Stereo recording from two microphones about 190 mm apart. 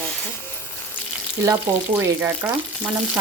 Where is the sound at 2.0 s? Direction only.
10° right (ahead or behind).